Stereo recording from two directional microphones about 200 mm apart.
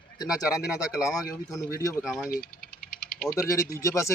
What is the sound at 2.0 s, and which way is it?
Speech, centre (ahead or behind).